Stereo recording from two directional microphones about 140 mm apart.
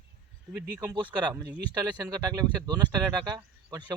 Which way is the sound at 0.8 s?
30° right (ahead or behind).